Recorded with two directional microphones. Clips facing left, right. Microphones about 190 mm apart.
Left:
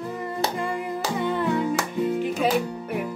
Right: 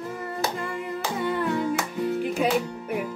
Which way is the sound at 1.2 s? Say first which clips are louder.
Left 1 dB; 10° right (ahead or behind).